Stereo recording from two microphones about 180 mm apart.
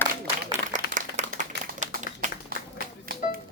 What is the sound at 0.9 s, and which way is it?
Clapping, 40° right (ahead or behind).